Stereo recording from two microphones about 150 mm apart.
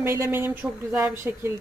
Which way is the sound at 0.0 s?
20° right (ahead or behind).